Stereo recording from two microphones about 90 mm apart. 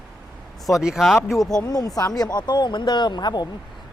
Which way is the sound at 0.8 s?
10° right (ahead or behind).